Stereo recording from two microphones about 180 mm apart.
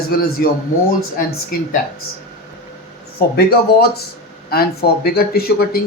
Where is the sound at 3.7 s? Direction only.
65° left (ahead or behind).